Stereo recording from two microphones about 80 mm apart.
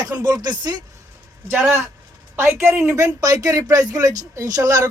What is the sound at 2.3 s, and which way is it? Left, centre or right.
Speech, right.